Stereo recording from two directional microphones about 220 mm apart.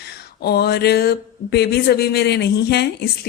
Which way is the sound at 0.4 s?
45° left (ahead or behind).